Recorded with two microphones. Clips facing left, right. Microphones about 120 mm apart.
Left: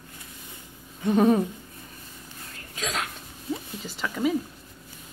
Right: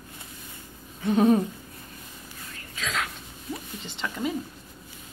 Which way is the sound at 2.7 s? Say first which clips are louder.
Even; 40° left (ahead or behind).